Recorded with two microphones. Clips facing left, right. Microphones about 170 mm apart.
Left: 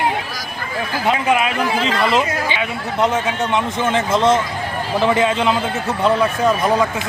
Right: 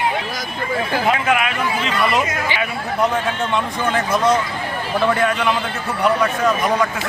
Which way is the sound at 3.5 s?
25° left (ahead or behind).